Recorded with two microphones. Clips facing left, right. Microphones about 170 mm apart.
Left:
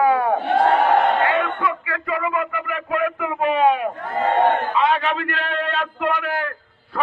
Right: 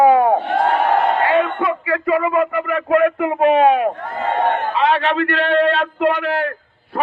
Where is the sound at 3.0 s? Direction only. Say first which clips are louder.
Right 7 dB; 65° right (ahead or behind); by 5.8 s 85° right.